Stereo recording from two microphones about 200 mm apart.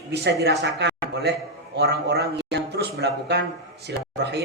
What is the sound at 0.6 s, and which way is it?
A man's voice, 60° right (ahead or behind).